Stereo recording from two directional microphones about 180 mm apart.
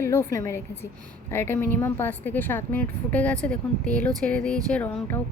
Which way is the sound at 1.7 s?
10° left (ahead or behind).